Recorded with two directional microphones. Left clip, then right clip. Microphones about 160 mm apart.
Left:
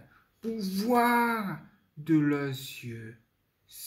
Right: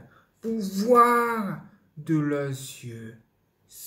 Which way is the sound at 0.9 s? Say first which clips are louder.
Right 6 dB; 35° left (ahead or behind).